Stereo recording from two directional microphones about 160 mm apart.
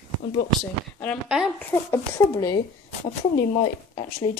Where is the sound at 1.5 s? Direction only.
20° left (ahead or behind).